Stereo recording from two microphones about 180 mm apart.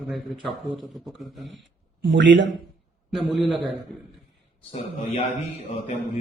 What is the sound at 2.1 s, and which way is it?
Speech, 80° right.